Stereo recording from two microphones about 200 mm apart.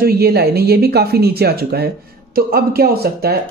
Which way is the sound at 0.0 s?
50° right (ahead or behind).